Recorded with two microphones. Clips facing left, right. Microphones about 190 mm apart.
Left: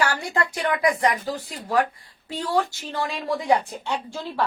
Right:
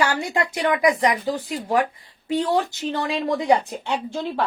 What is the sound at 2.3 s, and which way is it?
Speech, 20° right (ahead or behind).